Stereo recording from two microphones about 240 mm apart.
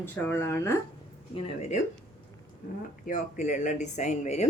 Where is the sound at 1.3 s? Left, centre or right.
Left.